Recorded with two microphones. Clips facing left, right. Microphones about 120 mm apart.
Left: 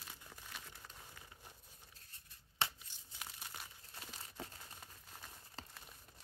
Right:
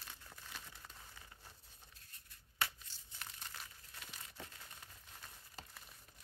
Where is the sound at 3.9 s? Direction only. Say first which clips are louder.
Left 3 dB; 30° left (ahead or behind).